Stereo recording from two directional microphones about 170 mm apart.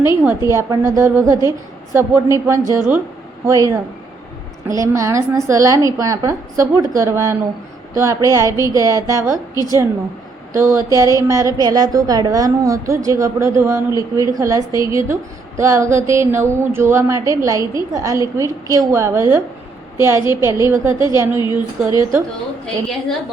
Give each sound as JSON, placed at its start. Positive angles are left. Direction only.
{"t": 0.3, "sound": "a woman's voice", "side_deg": -15}
{"t": 4.7, "sound": "a woman's voice", "side_deg": -20}
{"t": 21.3, "sound": "a woman's voice", "side_deg": 25}
{"t": 22.6, "sound": "a woman's voice", "side_deg": 5}